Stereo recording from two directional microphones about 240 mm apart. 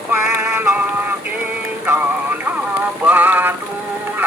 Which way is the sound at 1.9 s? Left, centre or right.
Centre.